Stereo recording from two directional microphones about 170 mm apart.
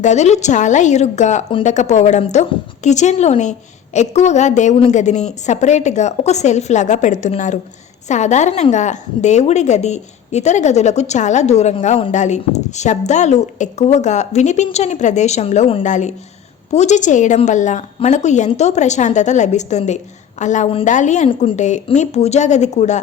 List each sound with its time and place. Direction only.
0.0 s a woman's voice: 45° left (ahead or behind)
21.2 s a woman's voice: 30° left (ahead or behind)
21.6 s a woman's voice: 45° left (ahead or behind)